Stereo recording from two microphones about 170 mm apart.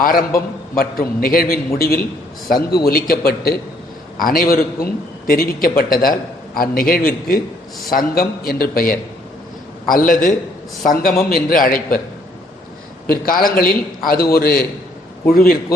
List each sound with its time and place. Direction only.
0.2 s a man's voice: 20° left (ahead or behind)
0.8 s a man's voice: 55° left (ahead or behind)
13.1 s a man's voice: 55° left (ahead or behind)